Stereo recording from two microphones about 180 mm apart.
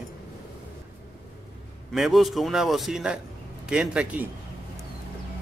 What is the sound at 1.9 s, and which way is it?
A man's voice, centre (ahead or behind).